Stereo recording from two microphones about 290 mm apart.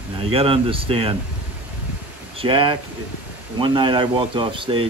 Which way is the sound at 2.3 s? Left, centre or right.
Centre.